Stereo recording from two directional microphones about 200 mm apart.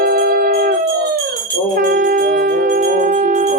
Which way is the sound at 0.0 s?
50° right (ahead or behind).